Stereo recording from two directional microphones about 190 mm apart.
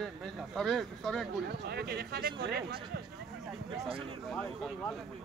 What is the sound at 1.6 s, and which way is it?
Speech, 55° right (ahead or behind).